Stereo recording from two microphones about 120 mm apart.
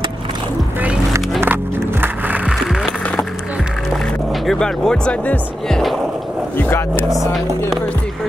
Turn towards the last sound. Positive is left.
turn(degrees=0)  # may be behind; listen again after turning